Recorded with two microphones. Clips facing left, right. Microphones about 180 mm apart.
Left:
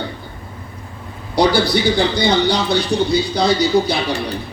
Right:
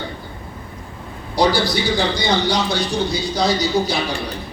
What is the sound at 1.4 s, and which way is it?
Speech, 60° left (ahead or behind).